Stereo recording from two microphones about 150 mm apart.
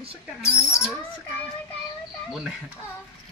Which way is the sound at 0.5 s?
5° right (ahead or behind).